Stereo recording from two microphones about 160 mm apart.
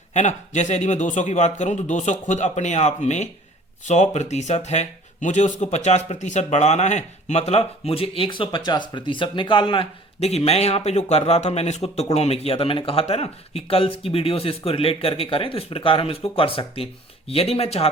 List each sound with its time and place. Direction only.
0.1 s a man's voice: 50° left (ahead or behind)